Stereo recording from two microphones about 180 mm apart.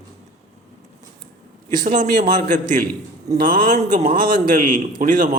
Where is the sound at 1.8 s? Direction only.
45° right (ahead or behind).